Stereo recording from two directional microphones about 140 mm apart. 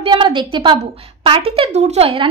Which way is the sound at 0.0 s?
35° right (ahead or behind).